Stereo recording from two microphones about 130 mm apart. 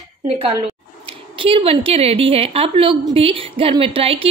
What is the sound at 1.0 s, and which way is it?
A woman's voice, 45° right (ahead or behind).